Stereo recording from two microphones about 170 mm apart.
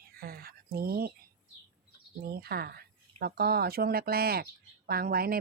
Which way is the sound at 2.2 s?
65° right (ahead or behind).